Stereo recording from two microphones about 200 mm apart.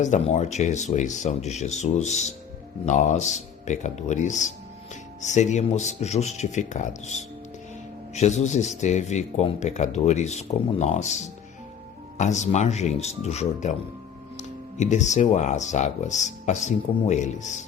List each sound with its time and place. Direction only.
0.0 s speech: 35° left (ahead or behind)